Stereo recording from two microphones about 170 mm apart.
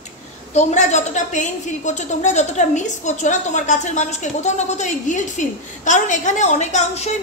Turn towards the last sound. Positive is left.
turn(degrees=40)  # may be behind; listen again after turning